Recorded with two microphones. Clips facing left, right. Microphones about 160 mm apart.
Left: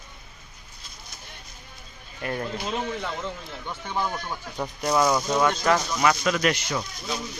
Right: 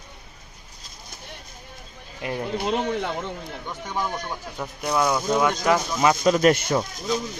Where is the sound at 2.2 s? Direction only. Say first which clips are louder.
Right 1 dB; 15° right (ahead or behind).